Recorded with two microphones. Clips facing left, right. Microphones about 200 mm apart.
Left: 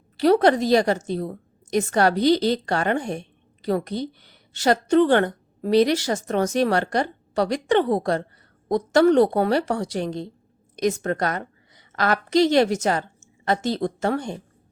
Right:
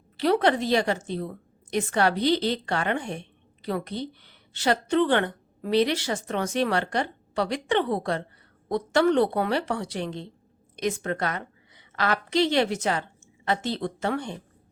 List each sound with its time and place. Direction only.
0.2 s a woman's voice: 40° left (ahead or behind)